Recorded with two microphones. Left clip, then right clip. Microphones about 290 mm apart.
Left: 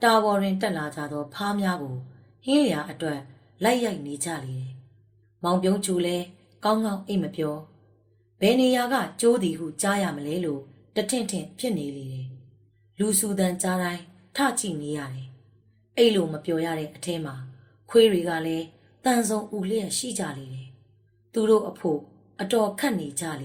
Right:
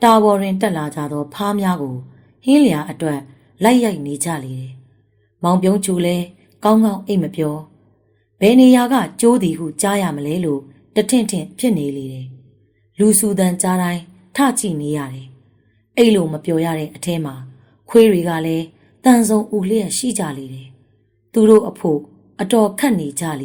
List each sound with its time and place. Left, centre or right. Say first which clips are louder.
0.0 s a woman's voice: right 8 dB; right
21.3 s a woman's voice: right 10 dB; right